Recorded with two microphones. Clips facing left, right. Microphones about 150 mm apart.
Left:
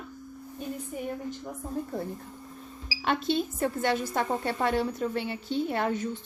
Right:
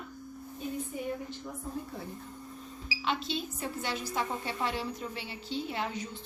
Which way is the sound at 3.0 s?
55° left (ahead or behind).